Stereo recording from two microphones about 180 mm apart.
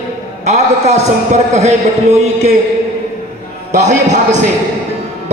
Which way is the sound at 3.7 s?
40° right (ahead or behind).